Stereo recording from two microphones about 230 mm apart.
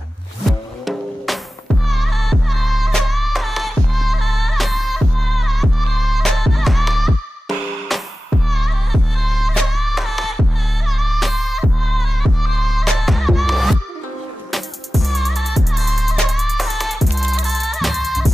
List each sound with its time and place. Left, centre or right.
0.5 s music: centre